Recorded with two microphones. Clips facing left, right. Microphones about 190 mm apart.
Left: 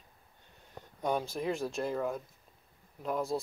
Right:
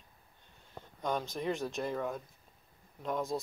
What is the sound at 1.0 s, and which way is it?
Speech, 10° left (ahead or behind).